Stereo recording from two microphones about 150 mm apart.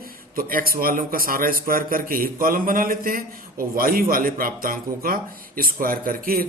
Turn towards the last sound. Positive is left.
turn(degrees=-70)  # may be behind; listen again after turning